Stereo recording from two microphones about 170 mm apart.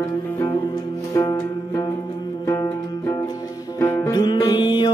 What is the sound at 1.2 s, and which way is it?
Music, 20° left (ahead or behind).